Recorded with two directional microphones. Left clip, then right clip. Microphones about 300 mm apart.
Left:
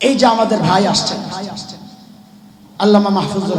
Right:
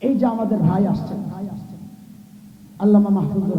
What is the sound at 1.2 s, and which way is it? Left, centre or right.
Speech, centre.